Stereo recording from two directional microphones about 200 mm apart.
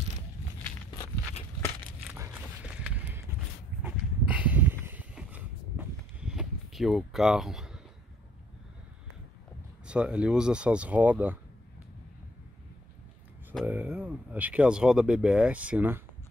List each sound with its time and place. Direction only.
2.1 s a sound: 10° right (ahead or behind)
9.8 s speech: 5° right (ahead or behind)
13.7 s speech: 10° right (ahead or behind)